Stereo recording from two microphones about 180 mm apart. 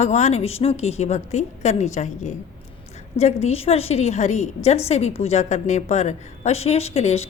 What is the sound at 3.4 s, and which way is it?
A woman's voice, 35° left (ahead or behind).